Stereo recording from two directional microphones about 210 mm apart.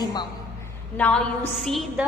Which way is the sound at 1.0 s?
5° left (ahead or behind).